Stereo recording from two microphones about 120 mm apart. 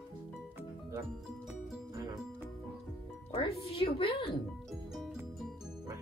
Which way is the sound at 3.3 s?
50° left (ahead or behind).